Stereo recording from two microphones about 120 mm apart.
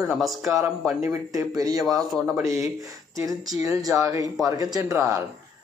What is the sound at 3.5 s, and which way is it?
Speech, 30° right (ahead or behind).